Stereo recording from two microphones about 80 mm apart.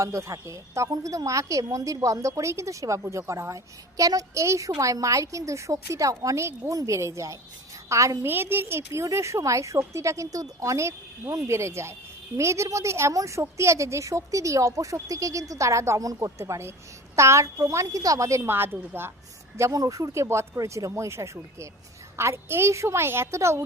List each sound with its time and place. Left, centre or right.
0.0 s a woman's voice: right
8.2 s a woman's voice: right
19.7 s speech: right
20.2 s a woman's voice: right